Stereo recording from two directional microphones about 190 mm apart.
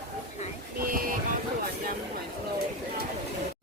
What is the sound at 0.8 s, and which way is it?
Boat, 45° right (ahead or behind).